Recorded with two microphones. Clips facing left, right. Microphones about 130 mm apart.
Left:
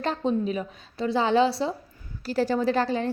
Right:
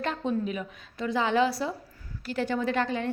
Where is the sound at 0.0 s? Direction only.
30° left (ahead or behind).